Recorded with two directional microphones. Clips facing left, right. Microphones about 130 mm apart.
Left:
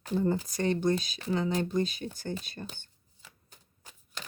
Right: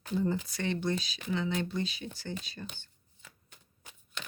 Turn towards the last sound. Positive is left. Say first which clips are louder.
# even
turn(degrees=40)  # may be behind; listen again after turning